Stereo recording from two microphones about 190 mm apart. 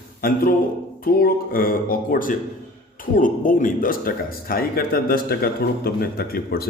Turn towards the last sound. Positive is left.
turn(degrees=55)  # may be behind; listen again after turning